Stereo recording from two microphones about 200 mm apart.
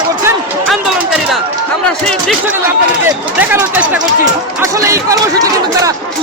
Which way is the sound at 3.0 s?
10° right (ahead or behind).